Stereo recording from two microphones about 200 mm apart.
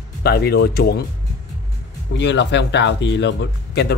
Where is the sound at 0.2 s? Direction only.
50° left (ahead or behind).